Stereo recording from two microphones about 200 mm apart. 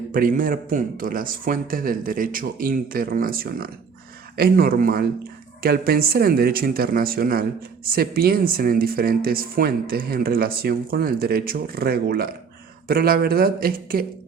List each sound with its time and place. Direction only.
0.1 s speech: 45° right (ahead or behind)